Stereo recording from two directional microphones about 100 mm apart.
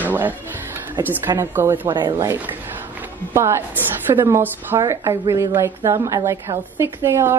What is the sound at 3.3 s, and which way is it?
A woman's voice, 30° right (ahead or behind).